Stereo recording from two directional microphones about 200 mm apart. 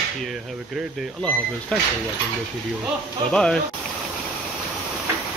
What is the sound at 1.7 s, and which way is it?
Speech, 5° left (ahead or behind).